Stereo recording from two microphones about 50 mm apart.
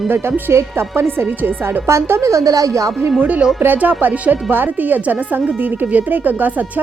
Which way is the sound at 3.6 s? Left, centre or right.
Right.